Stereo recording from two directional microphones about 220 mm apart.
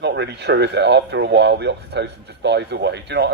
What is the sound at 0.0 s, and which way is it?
A man's voice, 50° right (ahead or behind).